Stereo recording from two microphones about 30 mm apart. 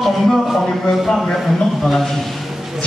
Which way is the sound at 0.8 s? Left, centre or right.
Centre.